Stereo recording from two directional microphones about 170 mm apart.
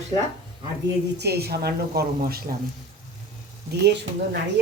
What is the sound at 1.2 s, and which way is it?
Speech, 70° right (ahead or behind).